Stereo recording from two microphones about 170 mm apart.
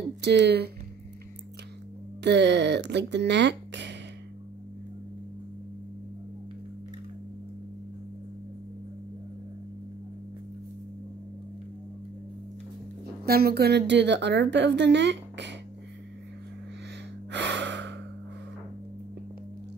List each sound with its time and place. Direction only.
0.2 s speech: 85° right
2.2 s a woman's voice: 90° right
13.2 s a woman's voice: 65° right (ahead or behind); by 15.5 s 90° right
17.3 s gasp: 90° right